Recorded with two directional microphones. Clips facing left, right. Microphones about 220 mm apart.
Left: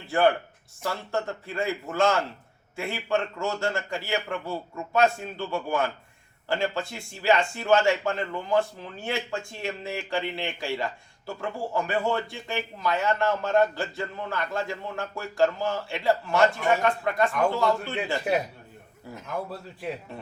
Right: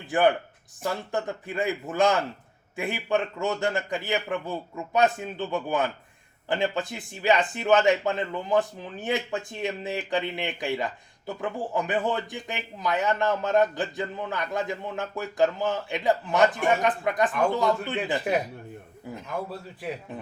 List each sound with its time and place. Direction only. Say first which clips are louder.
0.1 s speech: even; 15° right (ahead or behind)